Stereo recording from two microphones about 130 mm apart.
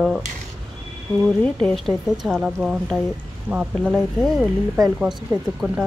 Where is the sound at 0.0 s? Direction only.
5° right (ahead or behind).